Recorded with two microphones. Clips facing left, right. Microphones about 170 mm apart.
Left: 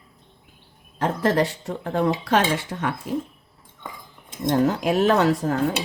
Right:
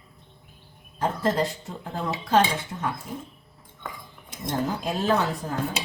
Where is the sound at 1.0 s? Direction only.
75° left (ahead or behind).